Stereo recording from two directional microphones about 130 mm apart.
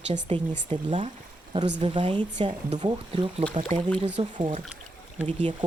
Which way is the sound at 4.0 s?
60° right (ahead or behind).